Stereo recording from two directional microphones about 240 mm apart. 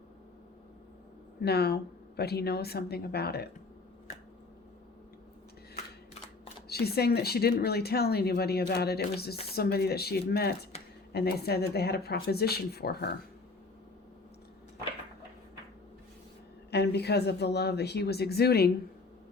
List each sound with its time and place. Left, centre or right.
1.4 s speech: left
6.7 s speech: left
16.7 s speech: left